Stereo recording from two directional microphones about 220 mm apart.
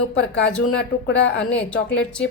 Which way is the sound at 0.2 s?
55° left (ahead or behind).